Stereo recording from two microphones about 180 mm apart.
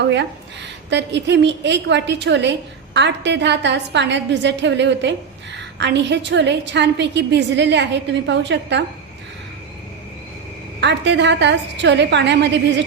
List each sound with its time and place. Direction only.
0.0 s a woman's voice: 80° right
10.8 s a woman's voice: 75° right (ahead or behind)